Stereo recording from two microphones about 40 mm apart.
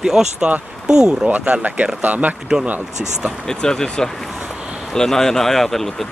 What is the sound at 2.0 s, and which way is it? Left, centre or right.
Speech, right.